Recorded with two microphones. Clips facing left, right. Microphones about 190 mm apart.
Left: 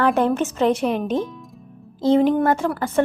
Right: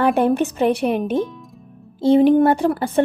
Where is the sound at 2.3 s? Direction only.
30° right (ahead or behind).